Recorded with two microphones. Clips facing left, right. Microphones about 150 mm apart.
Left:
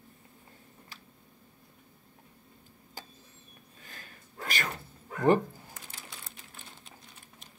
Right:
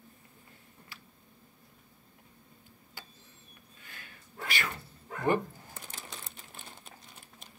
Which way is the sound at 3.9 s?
40° left (ahead or behind).